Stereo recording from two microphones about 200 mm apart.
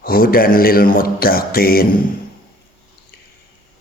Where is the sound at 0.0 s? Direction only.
50° left (ahead or behind).